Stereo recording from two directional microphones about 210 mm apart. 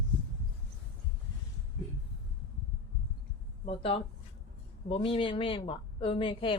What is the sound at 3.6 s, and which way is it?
A woman's voice, 25° left (ahead or behind).